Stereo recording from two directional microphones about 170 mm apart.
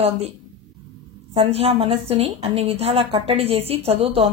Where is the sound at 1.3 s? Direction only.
35° right (ahead or behind).